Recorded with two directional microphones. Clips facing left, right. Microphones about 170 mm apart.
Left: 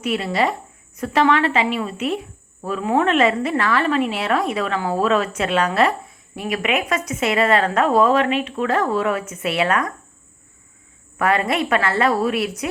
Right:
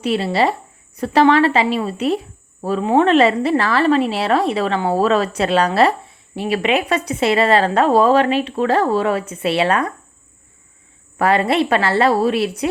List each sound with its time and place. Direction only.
0.0 s speech: 30° right (ahead or behind)
11.2 s speech: 30° right (ahead or behind)